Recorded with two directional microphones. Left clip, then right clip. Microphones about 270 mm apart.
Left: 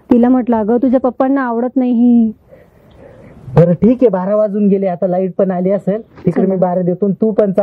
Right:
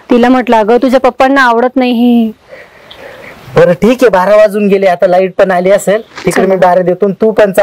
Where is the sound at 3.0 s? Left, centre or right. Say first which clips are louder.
Right 10 dB; centre.